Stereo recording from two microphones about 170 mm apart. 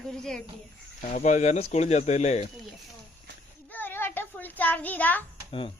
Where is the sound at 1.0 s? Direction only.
45° left (ahead or behind).